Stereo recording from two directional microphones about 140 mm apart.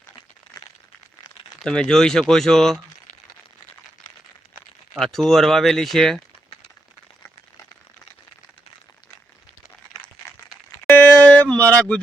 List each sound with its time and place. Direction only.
1.5 s speech: 5° left (ahead or behind)
4.9 s speech: 5° left (ahead or behind)
10.9 s a sound: 10° left (ahead or behind)